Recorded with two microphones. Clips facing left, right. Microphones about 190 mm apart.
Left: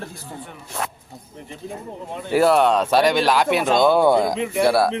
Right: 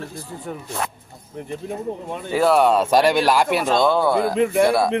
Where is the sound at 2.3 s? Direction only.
10° left (ahead or behind).